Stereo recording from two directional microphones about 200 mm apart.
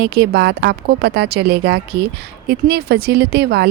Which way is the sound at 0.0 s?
55° right (ahead or behind).